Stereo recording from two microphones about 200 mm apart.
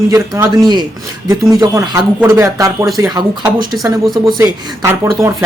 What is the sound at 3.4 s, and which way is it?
Speech, centre (ahead or behind).